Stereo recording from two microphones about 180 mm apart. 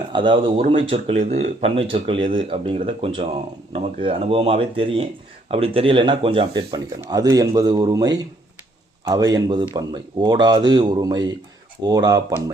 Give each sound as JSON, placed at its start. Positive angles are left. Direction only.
{"t": 0.1, "sound": "speech", "side_deg": -25}
{"t": 1.1, "sound": "speech", "side_deg": -40}